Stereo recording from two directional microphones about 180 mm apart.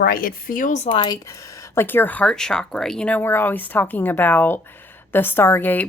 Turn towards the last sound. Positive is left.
turn(degrees=10)  # may be behind; listen again after turning